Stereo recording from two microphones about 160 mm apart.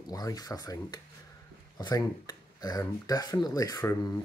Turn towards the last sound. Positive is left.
turn(degrees=20)  # may be behind; listen again after turning